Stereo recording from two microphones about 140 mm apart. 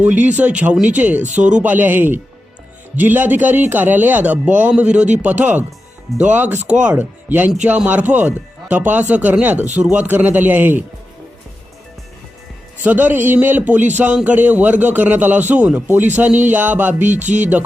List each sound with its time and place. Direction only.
0.0 s a man's voice: 10° right (ahead or behind)
12.8 s a man's voice: 10° right (ahead or behind)
17.1 s speech: 60° right (ahead or behind)